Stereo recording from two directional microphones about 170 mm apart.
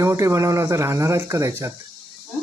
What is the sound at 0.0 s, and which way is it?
Speech, 15° right (ahead or behind).